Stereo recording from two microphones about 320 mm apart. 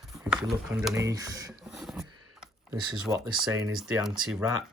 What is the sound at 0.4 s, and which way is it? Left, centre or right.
Speech, centre.